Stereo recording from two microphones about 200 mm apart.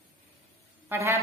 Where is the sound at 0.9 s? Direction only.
15° right (ahead or behind).